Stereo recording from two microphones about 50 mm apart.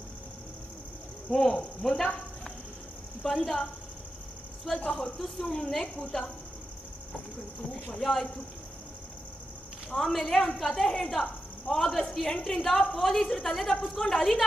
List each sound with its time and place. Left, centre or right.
1.3 s speech: centre
3.3 s speech: centre
4.9 s speech: centre
7.9 s speech: centre
9.9 s speech: centre